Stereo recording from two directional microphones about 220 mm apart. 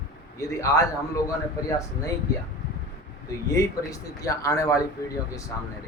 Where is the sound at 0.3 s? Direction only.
15° left (ahead or behind).